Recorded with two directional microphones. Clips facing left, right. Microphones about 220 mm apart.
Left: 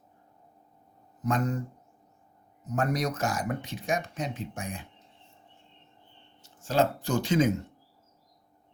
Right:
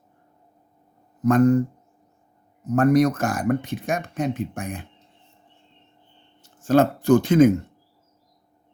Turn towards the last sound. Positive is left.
turn(degrees=-55)  # may be behind; listen again after turning